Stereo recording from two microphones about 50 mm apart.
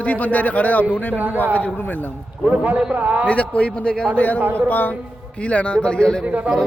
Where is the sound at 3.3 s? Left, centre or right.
Left.